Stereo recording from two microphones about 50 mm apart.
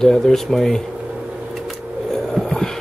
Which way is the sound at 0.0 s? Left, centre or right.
Centre.